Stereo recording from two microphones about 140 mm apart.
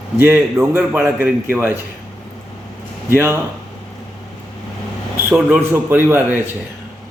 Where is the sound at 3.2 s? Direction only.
15° right (ahead or behind).